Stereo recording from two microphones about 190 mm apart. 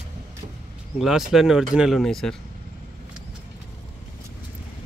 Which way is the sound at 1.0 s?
Centre (ahead or behind).